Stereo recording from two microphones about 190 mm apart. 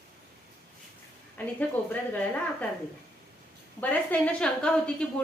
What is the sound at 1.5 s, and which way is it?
A woman's voice, 5° left (ahead or behind).